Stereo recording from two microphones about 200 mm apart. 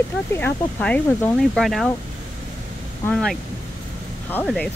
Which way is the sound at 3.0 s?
Centre (ahead or behind).